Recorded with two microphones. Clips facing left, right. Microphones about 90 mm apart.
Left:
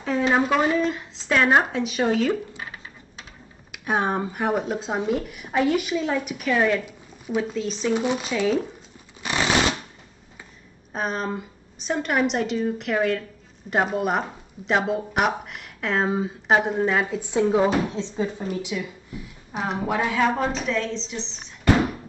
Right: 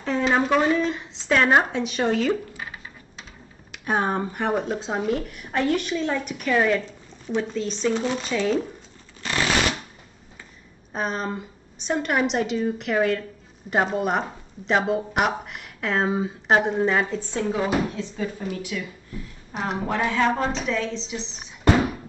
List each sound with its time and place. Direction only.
0.0 s speech: 5° left (ahead or behind)
3.7 s speech: centre (ahead or behind)
7.9 s speech: 15° left (ahead or behind)
8.3 s speech: 5° left (ahead or behind)
9.2 s shuffling cards: 20° left (ahead or behind)
10.9 s speech: centre (ahead or behind); by 19.2 s 20° left (ahead or behind)
19.5 s speech: centre (ahead or behind)